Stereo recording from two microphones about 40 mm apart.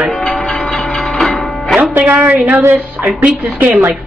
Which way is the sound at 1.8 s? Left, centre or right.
Right.